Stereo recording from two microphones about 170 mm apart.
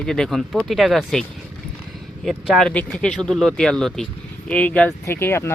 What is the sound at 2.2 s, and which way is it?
A man's voice, centre (ahead or behind).